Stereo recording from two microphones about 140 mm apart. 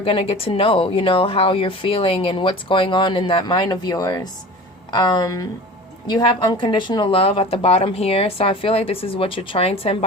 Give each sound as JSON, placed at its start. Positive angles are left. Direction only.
{"t": 0.0, "sound": "a woman's voice", "side_deg": 45}